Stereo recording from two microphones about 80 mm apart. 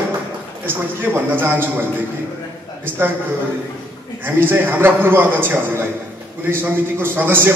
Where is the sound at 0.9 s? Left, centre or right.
Right.